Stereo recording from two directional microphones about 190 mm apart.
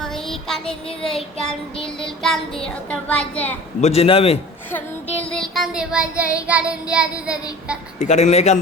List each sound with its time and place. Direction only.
0.0 s child singing: centre (ahead or behind)
3.8 s a man's voice: 35° left (ahead or behind)
5.2 s child singing: 5° left (ahead or behind)
7.9 s a man's voice: 35° left (ahead or behind)